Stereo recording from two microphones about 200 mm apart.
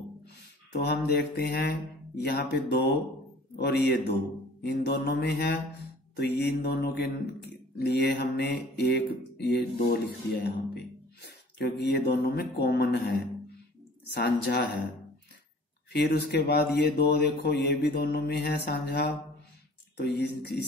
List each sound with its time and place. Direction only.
0.7 s speech: 55° left (ahead or behind)
15.9 s speech: 55° left (ahead or behind)